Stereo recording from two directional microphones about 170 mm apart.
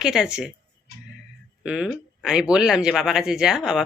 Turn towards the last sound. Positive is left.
turn(degrees=-5)  # may be behind; listen again after turning